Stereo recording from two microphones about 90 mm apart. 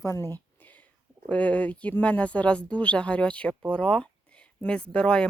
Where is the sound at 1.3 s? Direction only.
15° left (ahead or behind).